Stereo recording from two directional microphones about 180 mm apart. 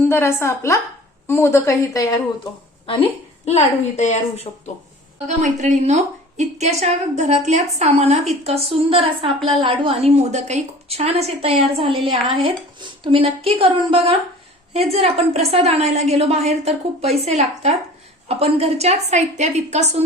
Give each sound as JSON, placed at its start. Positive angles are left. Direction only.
{"t": 0.1, "sound": "a woman's voice", "side_deg": 15}
{"t": 3.4, "sound": "a woman's voice", "side_deg": 35}
{"t": 5.3, "sound": "a woman's voice", "side_deg": -40}